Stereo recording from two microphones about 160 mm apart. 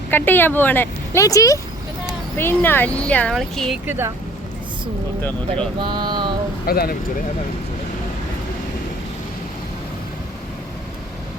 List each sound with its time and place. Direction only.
0.1 s speech: 10° left (ahead or behind)
3.8 s speech: 15° right (ahead or behind)
5.8 s a sound: 30° right (ahead or behind)
6.7 s speech: 70° left (ahead or behind)